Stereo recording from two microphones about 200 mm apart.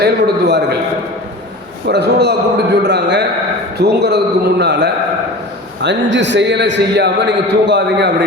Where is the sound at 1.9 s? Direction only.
55° right (ahead or behind).